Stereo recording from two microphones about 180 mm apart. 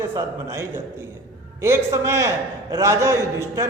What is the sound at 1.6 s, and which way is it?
A man's voice, 15° right (ahead or behind).